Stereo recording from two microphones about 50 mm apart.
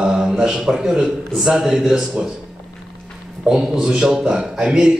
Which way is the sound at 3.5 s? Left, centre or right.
Centre.